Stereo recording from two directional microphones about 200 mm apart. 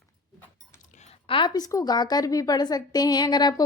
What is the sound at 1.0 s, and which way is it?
A woman's voice, 30° left (ahead or behind).